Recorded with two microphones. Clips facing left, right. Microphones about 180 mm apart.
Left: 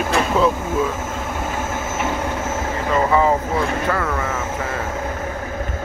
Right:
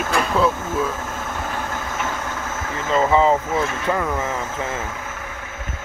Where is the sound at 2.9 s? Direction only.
20° right (ahead or behind).